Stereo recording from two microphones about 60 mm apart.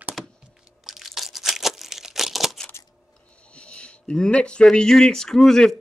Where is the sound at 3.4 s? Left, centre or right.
Centre.